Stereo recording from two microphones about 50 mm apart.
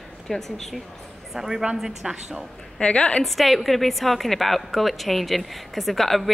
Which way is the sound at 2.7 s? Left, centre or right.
Left.